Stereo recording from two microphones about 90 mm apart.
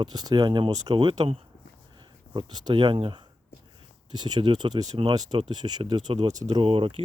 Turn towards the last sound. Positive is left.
turn(degrees=-85)